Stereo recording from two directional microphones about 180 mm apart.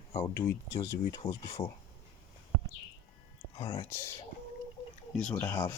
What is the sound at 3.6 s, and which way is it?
Speech, 25° left (ahead or behind).